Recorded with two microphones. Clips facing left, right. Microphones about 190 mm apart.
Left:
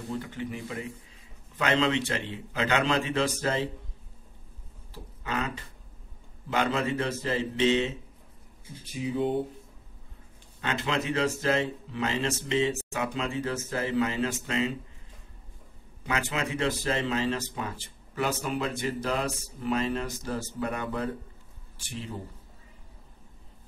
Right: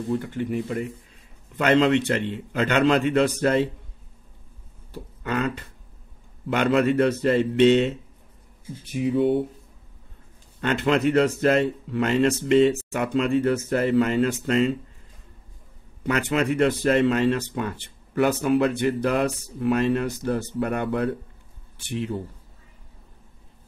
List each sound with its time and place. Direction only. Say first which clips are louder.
0.2 s speech: right 8 dB; 55° right (ahead or behind)
4.9 s a sound: right 6 dB; 60° right (ahead or behind)
6.5 s speech: right 7 dB; 65° right (ahead or behind)
8.9 s speech: right 7 dB; 65° right (ahead or behind)
10.6 s speech: right 9 dB; 60° right (ahead or behind)
16.1 s speech: right 8 dB; 60° right (ahead or behind)